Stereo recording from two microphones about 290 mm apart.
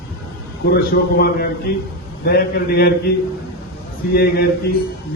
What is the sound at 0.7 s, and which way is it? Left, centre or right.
A man's voice, left.